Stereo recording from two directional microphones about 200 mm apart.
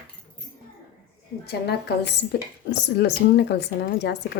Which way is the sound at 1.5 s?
55° left (ahead or behind).